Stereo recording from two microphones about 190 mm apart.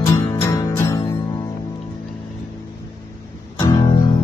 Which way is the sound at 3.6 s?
20° left (ahead or behind).